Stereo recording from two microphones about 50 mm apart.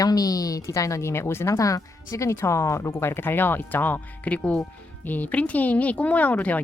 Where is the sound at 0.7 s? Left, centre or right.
Left.